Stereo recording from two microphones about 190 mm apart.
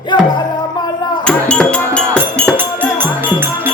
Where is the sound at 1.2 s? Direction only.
5° left (ahead or behind).